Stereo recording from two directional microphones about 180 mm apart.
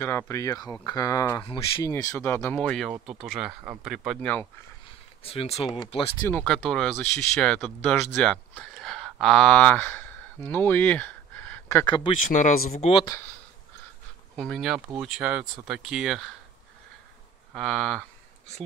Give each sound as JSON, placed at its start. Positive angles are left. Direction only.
{"t": 0.3, "sound": "speech", "side_deg": 20}
{"t": 4.2, "sound": "speech", "side_deg": 10}
{"t": 5.2, "sound": "speech", "side_deg": 30}
{"t": 6.2, "sound": "speech", "side_deg": 5}
{"t": 11.8, "sound": "speech", "side_deg": 25}
{"t": 12.3, "sound": "speech", "side_deg": 45}
{"t": 14.3, "sound": "speech", "side_deg": 0}
{"t": 17.6, "sound": "speech", "side_deg": 0}